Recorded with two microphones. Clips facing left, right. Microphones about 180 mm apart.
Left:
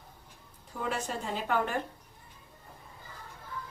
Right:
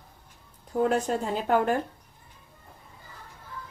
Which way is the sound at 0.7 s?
45° right (ahead or behind).